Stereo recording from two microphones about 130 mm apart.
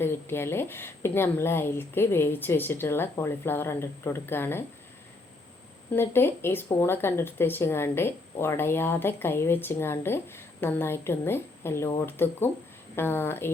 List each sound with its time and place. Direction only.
0.0 s a woman's voice: 15° left (ahead or behind)
5.9 s a woman's voice: 20° left (ahead or behind)